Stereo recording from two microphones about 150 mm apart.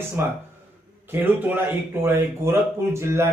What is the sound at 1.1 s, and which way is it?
Speech, 10° right (ahead or behind).